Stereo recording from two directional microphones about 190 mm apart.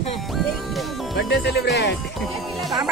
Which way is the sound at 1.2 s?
60° left (ahead or behind).